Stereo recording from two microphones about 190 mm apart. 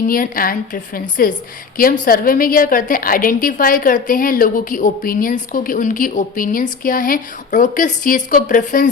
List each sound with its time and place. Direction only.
0.1 s a woman's voice: 50° left (ahead or behind)